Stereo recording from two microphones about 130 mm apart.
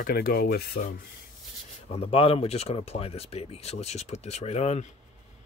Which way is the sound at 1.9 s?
45° left (ahead or behind).